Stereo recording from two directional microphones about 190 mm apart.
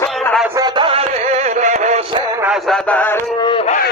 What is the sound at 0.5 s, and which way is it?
Music, 25° right (ahead or behind).